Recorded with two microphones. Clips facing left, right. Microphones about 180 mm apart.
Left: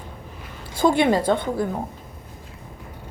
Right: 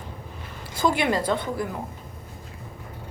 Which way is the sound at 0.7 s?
25° left (ahead or behind).